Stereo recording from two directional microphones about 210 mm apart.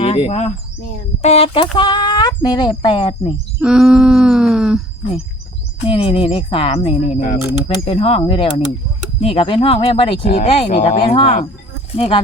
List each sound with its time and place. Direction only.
0.0 s speech: 30° left (ahead or behind)
3.6 s owl: 5° right (ahead or behind)
5.9 s speech: 25° left (ahead or behind)